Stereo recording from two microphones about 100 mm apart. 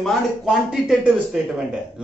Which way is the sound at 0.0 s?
5° right (ahead or behind).